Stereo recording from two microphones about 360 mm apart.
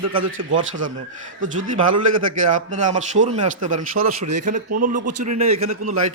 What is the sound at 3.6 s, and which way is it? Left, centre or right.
Speech, right.